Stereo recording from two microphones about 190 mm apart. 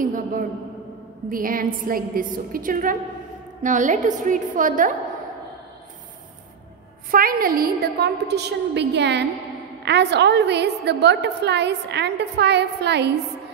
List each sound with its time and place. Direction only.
0.0 s a sound: 45° right (ahead or behind)
1.3 s a woman's voice: 50° right (ahead or behind)
7.1 s a woman's voice: 50° right (ahead or behind)